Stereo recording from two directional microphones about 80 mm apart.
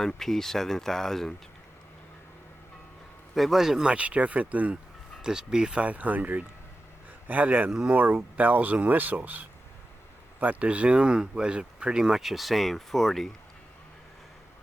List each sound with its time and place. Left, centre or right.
0.0 s speech: centre
3.3 s speech: centre; by 7.7 s right
7.7 s speech: centre
7.9 s speech: right; by 13.3 s centre